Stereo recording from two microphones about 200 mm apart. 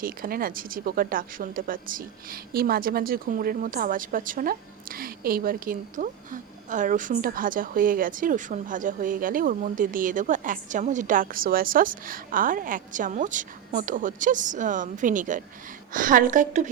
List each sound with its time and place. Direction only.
0.0 s a woman's voice: 45° right (ahead or behind)